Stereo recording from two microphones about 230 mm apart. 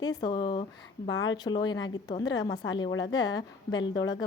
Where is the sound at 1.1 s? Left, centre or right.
Left.